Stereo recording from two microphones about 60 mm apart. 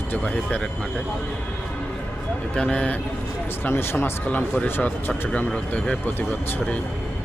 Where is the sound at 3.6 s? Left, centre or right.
Left.